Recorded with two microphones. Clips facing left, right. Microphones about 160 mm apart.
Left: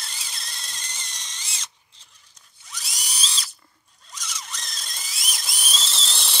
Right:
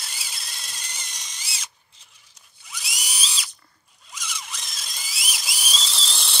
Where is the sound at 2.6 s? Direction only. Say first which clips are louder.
Right 2 dB; 5° right (ahead or behind).